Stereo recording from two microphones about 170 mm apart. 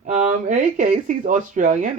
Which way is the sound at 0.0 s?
45° right (ahead or behind).